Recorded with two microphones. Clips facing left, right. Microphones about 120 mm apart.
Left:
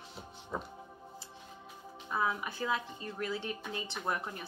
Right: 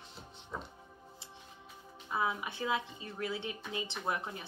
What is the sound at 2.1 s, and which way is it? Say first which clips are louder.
Speech: left 1 dB; 20° right (ahead or behind).